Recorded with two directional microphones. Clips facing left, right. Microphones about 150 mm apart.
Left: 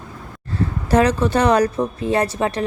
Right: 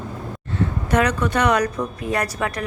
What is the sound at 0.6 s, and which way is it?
Speech, 30° left (ahead or behind).